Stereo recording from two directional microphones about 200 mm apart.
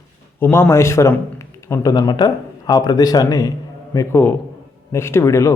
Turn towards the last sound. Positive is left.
turn(degrees=15)  # may be behind; listen again after turning